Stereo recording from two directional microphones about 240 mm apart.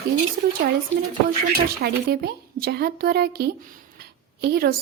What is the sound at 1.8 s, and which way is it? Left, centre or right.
A woman's voice, right.